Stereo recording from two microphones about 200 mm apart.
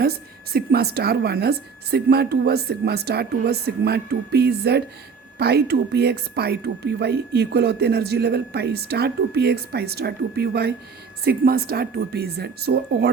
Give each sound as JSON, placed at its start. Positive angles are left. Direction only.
{"t": 0.0, "sound": "a woman's voice", "side_deg": -50}